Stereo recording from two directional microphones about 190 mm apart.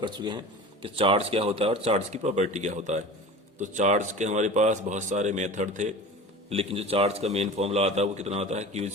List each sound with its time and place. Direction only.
0.0 s speech: 25° right (ahead or behind)